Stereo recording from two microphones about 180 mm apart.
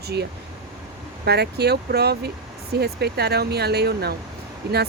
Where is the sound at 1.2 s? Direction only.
65° right (ahead or behind).